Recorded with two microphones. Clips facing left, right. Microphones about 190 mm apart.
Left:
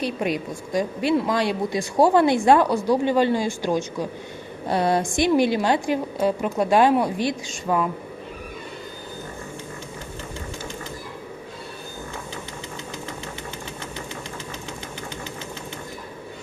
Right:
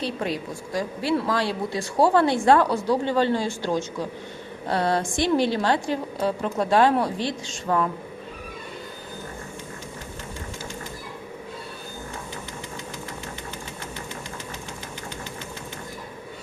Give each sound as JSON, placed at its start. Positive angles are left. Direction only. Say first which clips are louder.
{"t": 0.0, "sound": "a woman's voice", "louder": "left 3 dB", "side_deg": 15}